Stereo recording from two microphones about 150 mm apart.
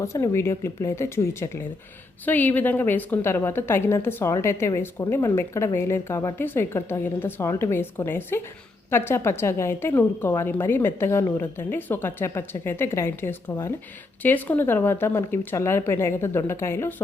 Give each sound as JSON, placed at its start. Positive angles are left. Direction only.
{"t": 0.0, "sound": "a woman's voice", "side_deg": 20}